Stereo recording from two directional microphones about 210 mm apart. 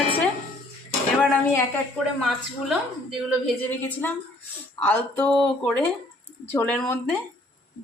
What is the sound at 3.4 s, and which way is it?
Speech, 10° left (ahead or behind).